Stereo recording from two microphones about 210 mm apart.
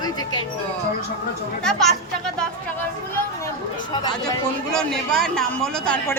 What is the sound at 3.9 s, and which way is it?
Speech, 20° left (ahead or behind).